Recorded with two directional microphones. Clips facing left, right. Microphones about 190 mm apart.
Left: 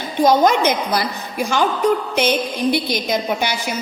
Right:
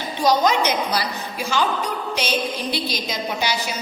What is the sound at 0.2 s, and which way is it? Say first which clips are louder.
A woman's voice: left 4 dB; 50° left (ahead or behind).